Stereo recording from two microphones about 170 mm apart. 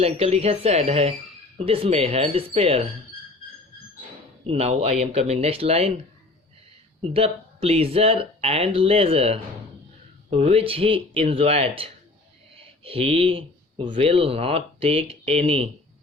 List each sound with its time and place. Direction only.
0.0 s speech: 35° right (ahead or behind)
4.4 s speech: 35° right (ahead or behind)
7.0 s speech: 35° right (ahead or behind)